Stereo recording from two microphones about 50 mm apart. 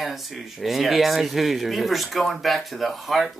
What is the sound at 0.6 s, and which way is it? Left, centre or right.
Speech, centre.